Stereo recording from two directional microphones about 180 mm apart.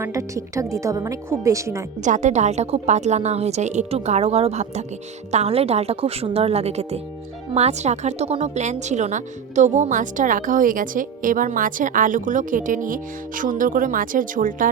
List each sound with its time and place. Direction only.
0.0 s a woman's voice: 15° right (ahead or behind)
2.0 s a woman's voice: 45° right (ahead or behind)